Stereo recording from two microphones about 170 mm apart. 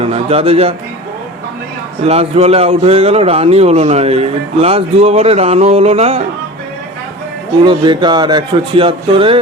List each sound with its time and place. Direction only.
0.0 s speech: 35° right (ahead or behind)
2.0 s speech: 35° right (ahead or behind)
7.6 s speech: 25° right (ahead or behind)